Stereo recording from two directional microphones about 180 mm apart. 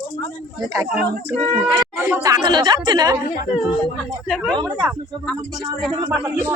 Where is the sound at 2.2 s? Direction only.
20° right (ahead or behind).